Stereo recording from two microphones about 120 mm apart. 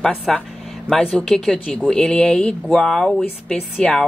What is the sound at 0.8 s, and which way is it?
Speech, 5° left (ahead or behind).